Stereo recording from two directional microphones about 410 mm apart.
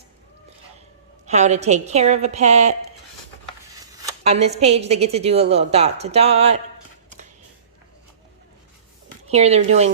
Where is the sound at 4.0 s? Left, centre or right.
Centre.